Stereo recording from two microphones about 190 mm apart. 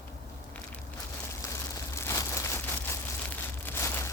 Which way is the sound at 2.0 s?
15° left (ahead or behind).